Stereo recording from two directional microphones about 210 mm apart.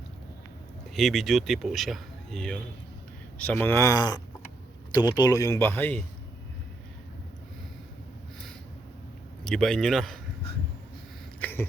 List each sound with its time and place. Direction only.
0.9 s speech: centre (ahead or behind)
9.4 s a man's voice: centre (ahead or behind)
11.3 s a sound: 10° left (ahead or behind)